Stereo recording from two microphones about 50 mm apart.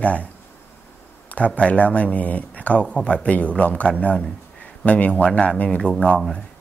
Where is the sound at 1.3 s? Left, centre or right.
Left.